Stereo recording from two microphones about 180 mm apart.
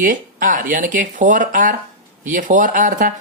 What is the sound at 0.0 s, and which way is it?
Speech, 45° right (ahead or behind).